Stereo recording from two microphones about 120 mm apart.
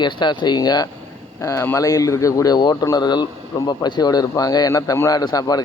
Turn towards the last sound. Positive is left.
turn(degrees=30)  # may be behind; listen again after turning